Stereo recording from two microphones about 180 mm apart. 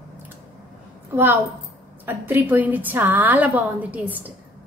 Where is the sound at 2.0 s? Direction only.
10° right (ahead or behind).